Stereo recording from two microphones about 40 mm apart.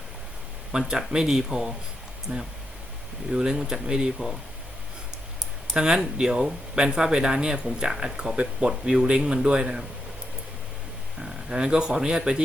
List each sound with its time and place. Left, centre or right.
0.9 s speech: centre
2.3 s speech: right
3.3 s speech: centre
5.7 s speech: centre
11.2 s speech: centre